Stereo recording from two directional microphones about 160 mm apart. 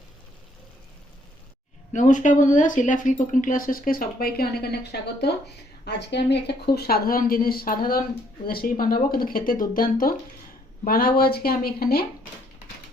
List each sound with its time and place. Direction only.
1.9 s speech: 50° left (ahead or behind); by 12.0 s 70° left (ahead or behind)